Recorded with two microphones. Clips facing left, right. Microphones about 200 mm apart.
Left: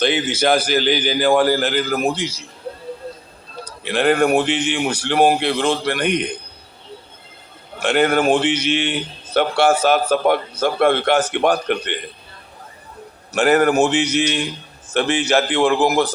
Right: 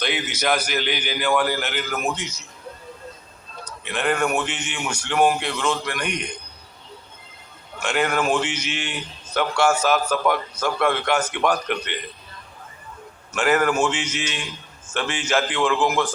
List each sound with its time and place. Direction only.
0.0 s a man's voice: 30° left (ahead or behind)
3.5 s a man's voice: 35° left (ahead or behind)
7.8 s a man's voice: 30° left (ahead or behind)
13.3 s a man's voice: 35° left (ahead or behind)